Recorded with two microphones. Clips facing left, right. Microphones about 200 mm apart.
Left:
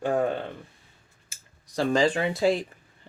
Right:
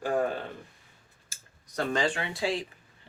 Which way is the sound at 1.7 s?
35° left (ahead or behind).